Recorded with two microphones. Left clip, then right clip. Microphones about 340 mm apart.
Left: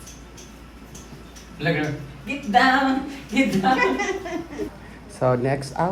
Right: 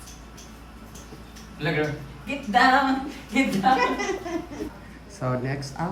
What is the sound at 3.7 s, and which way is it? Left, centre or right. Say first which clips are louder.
Speech: left 2 dB; centre.